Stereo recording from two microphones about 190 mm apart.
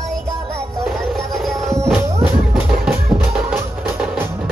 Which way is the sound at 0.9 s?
Centre (ahead or behind).